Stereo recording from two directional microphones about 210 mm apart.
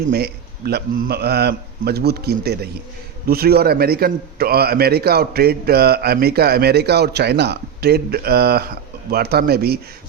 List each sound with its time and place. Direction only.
0.1 s a man's voice: 50° right (ahead or behind)